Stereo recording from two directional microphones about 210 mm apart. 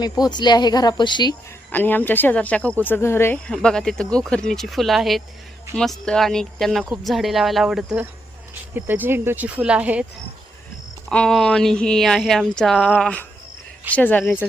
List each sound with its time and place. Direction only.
0.0 s speech: 20° left (ahead or behind)
1.7 s speech: 10° left (ahead or behind)
11.1 s speech: 5° left (ahead or behind)